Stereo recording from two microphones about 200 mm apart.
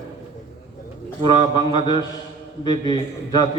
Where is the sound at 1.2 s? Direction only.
20° left (ahead or behind).